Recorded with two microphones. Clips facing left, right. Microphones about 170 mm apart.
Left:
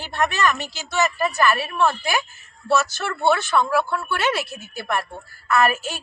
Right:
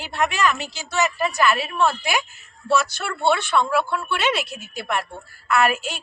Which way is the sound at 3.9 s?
15° right (ahead or behind).